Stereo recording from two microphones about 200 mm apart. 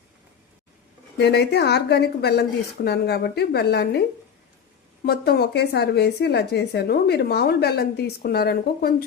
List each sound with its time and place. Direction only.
1.2 s speech: 55° left (ahead or behind)
5.0 s speech: 50° left (ahead or behind)